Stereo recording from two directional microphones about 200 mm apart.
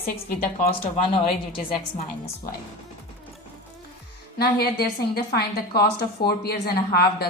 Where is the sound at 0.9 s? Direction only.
25° left (ahead or behind).